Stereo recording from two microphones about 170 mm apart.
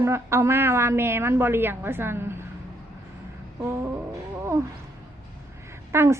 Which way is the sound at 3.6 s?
15° right (ahead or behind).